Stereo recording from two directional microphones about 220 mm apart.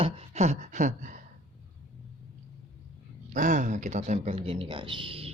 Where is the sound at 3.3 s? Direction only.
35° right (ahead or behind).